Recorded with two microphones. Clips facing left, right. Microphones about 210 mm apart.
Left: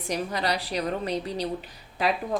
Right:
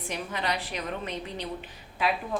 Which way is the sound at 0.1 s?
40° left (ahead or behind).